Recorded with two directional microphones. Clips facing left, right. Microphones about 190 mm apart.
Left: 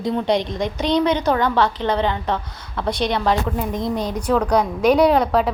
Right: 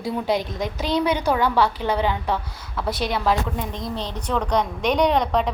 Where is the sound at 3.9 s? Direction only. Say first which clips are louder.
Left 5 dB; 10° left (ahead or behind).